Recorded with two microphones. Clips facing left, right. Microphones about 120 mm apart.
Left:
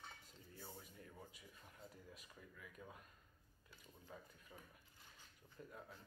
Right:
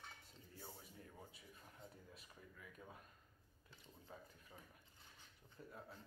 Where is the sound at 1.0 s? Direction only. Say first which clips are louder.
Even; 30° right (ahead or behind).